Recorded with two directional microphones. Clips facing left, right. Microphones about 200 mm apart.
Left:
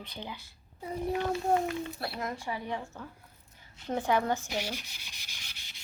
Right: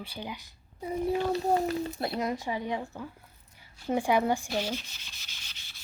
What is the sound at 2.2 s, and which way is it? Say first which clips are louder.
A woman's voice: right 4 dB; 20° right (ahead or behind).